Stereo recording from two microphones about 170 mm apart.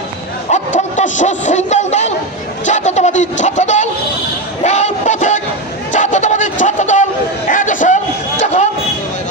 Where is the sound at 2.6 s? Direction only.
45° left (ahead or behind).